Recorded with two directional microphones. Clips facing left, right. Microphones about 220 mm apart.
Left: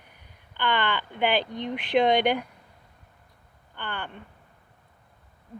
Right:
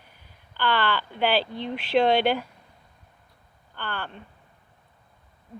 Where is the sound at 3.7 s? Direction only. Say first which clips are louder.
Right 1 dB; 15° left (ahead or behind).